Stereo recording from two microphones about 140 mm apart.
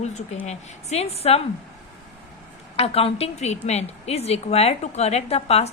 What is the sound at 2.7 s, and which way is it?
A woman's voice, 45° left (ahead or behind).